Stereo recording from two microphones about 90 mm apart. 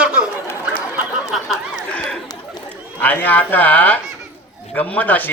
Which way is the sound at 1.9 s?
10° left (ahead or behind).